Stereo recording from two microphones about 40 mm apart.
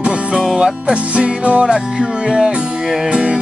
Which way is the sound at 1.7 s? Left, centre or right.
Centre.